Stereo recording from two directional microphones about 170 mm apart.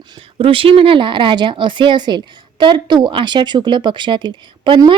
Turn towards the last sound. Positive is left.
turn(degrees=-25)  # may be behind; listen again after turning